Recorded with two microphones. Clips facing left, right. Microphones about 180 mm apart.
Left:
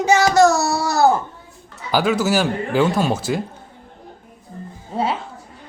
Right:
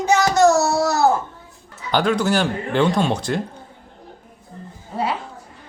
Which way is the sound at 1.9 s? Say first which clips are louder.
Left 1 dB; 5° left (ahead or behind).